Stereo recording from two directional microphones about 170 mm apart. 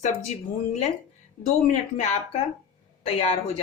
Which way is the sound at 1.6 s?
45° left (ahead or behind).